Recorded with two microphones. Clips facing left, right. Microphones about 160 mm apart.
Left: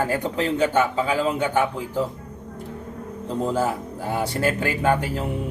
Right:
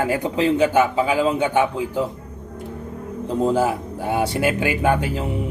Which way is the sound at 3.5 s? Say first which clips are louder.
Right 4 dB; 5° right (ahead or behind).